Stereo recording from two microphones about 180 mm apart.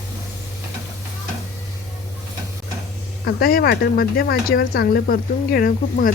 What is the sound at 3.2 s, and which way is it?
Speech, 55° left (ahead or behind).